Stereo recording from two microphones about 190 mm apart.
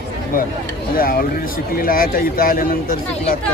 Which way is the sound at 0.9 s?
50° left (ahead or behind).